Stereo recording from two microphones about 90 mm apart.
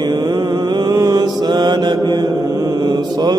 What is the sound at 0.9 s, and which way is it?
Mantra, 45° right (ahead or behind).